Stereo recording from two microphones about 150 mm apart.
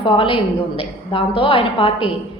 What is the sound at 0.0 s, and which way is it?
A woman's voice, 35° left (ahead or behind).